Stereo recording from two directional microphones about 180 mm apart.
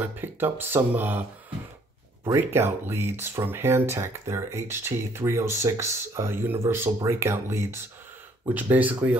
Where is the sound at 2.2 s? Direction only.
15° right (ahead or behind).